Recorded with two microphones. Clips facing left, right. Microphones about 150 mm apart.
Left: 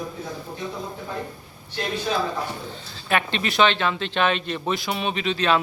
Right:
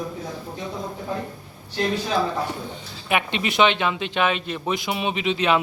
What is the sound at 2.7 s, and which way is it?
A man's voice, 15° right (ahead or behind).